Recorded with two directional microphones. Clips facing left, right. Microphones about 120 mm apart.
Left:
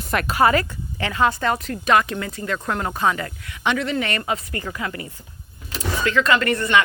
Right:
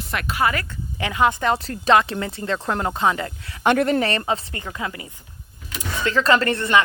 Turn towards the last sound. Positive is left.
turn(degrees=-30)  # may be behind; listen again after turning